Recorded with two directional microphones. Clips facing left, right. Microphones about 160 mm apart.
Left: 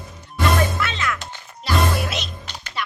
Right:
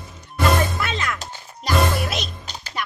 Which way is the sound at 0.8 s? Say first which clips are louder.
Even; 40° right (ahead or behind).